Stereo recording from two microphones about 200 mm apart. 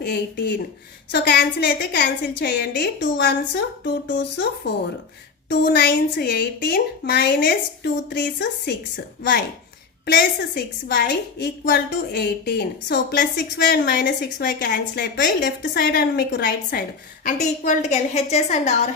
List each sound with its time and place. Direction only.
0.0 s a woman's voice: 55° left (ahead or behind)
10.1 s a woman's voice: 55° left (ahead or behind)
17.2 s a woman's voice: 35° left (ahead or behind)